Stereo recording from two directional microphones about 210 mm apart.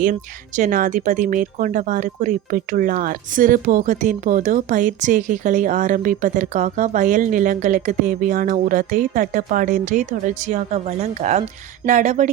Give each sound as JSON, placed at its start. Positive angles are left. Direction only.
{"t": 0.0, "sound": "speech", "side_deg": -40}